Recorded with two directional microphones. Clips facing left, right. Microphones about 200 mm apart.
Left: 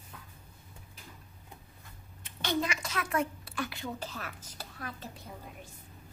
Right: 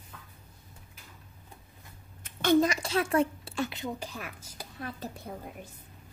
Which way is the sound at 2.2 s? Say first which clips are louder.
Right 9 dB; 50° right (ahead or behind).